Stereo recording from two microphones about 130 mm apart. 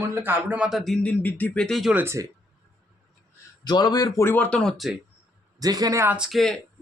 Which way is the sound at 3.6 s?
30° left (ahead or behind).